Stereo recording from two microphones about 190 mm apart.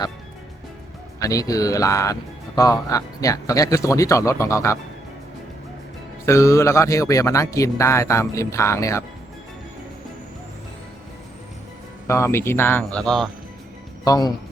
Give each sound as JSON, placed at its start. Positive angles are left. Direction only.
{"t": 1.2, "sound": "a man's voice", "side_deg": 20}
{"t": 6.2, "sound": "a man's voice", "side_deg": 15}
{"t": 12.0, "sound": "a man's voice", "side_deg": 15}
{"t": 14.0, "sound": "speech", "side_deg": 20}